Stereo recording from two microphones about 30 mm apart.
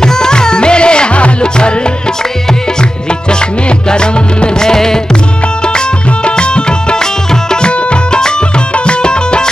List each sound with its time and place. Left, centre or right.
0.0 s music: left
3.3 s music: left
6.2 s music: left